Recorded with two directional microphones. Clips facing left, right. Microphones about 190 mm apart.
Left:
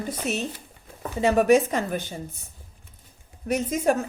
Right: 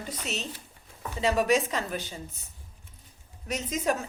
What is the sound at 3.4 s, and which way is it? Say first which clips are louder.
Speech: left 6 dB; 55° left (ahead or behind).